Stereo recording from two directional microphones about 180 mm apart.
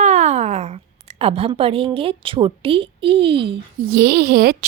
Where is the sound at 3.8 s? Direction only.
60° right (ahead or behind).